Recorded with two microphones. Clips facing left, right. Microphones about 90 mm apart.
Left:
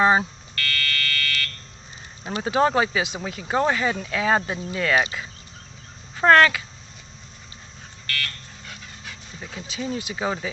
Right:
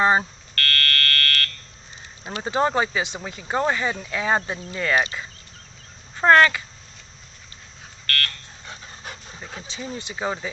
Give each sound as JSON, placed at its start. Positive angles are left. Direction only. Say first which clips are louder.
{"t": 0.0, "sound": "speech", "louder": "left 1 dB", "side_deg": 5}
{"t": 0.5, "sound": "fire alarm", "louder": "right 3 dB", "side_deg": -50}
{"t": 2.4, "sound": "speech", "louder": "left 2 dB", "side_deg": 0}
{"t": 6.1, "sound": "speech", "louder": "even", "side_deg": -5}
{"t": 8.0, "sound": "buzzer", "louder": "right 3 dB", "side_deg": -50}
{"t": 9.6, "sound": "speech", "louder": "left 5 dB", "side_deg": 5}